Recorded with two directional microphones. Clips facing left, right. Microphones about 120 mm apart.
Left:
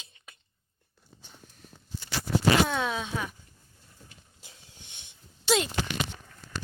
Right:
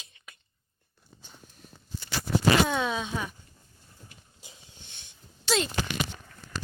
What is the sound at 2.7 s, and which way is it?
Speech, centre (ahead or behind).